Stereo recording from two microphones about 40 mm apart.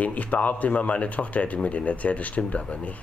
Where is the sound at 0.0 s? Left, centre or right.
Left.